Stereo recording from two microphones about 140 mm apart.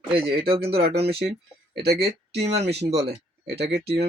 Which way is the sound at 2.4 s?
50° right (ahead or behind).